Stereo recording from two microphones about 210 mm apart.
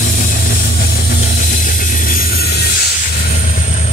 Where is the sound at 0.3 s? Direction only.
45° left (ahead or behind).